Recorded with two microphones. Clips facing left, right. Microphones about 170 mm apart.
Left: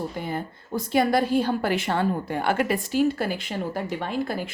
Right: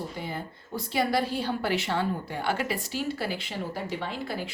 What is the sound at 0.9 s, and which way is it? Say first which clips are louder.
A woman's voice: left 6 dB; 50° left (ahead or behind).